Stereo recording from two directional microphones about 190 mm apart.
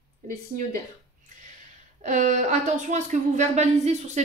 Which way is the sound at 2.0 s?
40° right (ahead or behind).